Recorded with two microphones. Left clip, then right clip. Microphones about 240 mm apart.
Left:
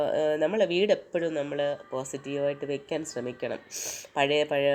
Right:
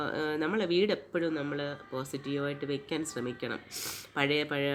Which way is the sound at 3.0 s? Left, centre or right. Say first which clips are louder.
Left 3 dB; centre.